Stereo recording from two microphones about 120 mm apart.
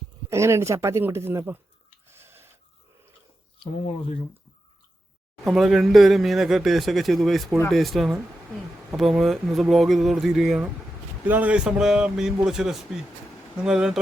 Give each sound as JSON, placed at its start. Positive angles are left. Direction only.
{"t": 0.3, "sound": "speech", "side_deg": -25}
{"t": 2.0, "sound": "a sound", "side_deg": -20}
{"t": 3.6, "sound": "speech", "side_deg": 55}
{"t": 5.5, "sound": "a man's voice", "side_deg": 0}